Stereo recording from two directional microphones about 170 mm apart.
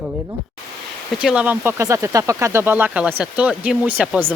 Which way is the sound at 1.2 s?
5° right (ahead or behind).